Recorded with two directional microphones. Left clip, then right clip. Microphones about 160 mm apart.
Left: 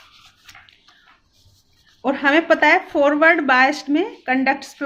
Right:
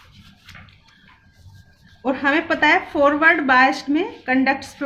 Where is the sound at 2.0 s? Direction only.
40° left (ahead or behind).